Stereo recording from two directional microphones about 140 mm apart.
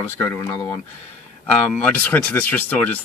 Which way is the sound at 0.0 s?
15° left (ahead or behind).